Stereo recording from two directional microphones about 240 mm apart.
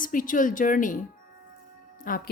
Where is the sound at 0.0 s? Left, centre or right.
Left.